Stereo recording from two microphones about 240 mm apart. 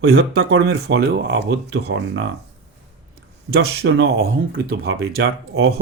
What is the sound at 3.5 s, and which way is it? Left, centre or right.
Speech, right.